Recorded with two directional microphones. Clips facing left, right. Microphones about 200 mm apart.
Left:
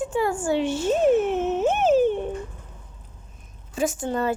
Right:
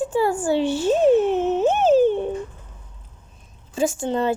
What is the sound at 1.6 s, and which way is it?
Music, 30° right (ahead or behind).